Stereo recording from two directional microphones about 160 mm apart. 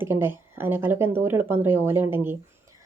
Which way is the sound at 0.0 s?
15° right (ahead or behind).